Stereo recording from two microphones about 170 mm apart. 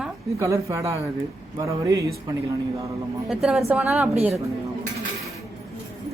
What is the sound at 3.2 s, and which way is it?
Speech, centre (ahead or behind).